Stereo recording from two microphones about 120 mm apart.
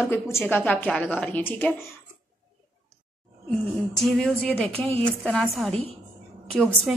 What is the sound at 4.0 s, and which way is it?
A woman's voice, 5° left (ahead or behind).